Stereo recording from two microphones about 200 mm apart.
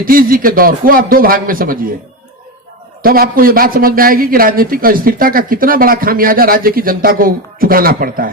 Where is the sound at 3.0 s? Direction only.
45° right (ahead or behind).